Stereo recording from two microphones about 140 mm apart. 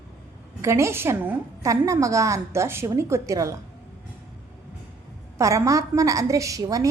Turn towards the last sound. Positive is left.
turn(degrees=-25)  # may be behind; listen again after turning